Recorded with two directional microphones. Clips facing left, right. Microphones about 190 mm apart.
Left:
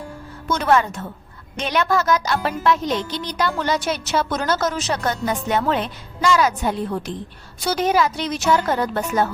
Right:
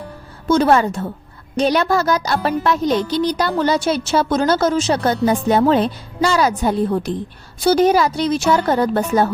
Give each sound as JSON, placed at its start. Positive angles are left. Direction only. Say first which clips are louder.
{"t": 0.4, "sound": "a woman's voice", "louder": "right 5 dB", "side_deg": -30}